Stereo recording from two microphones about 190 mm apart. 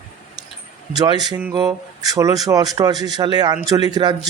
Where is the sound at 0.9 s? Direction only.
20° right (ahead or behind).